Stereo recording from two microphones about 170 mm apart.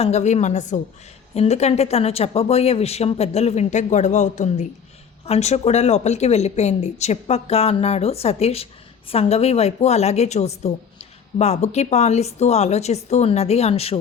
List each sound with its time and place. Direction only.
0.0 s a woman's voice: 40° left (ahead or behind)